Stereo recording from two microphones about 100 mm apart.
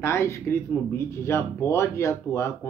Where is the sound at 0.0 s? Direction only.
25° left (ahead or behind).